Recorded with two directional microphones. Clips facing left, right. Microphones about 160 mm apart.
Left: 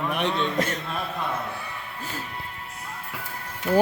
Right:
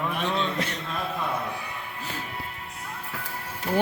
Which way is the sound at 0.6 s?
45° left (ahead or behind).